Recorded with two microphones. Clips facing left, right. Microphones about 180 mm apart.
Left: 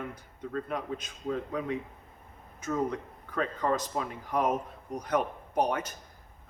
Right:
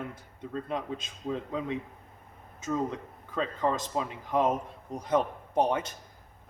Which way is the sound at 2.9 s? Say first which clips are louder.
Even; 20° right (ahead or behind).